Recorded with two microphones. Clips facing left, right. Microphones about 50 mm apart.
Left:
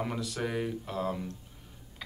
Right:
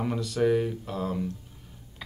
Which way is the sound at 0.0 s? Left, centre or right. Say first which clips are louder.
Right 7 dB; centre.